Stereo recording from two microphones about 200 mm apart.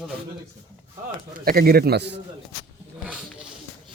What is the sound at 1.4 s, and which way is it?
Speech, 50° right (ahead or behind).